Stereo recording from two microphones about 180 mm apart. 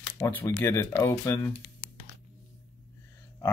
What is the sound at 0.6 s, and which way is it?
Speech, 15° left (ahead or behind).